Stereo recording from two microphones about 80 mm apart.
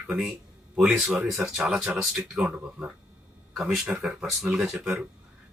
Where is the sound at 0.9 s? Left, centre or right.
Centre.